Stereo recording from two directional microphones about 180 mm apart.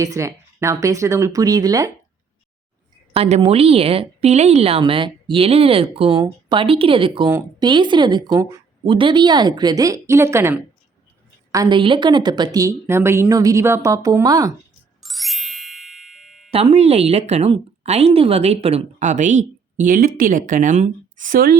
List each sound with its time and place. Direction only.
0.0 s speech: 20° right (ahead or behind)
3.1 s a woman's voice: 35° right (ahead or behind); by 14.5 s 20° right (ahead or behind)
15.0 s ding: centre (ahead or behind)
16.5 s speech: 35° right (ahead or behind); by 21.6 s 55° right (ahead or behind)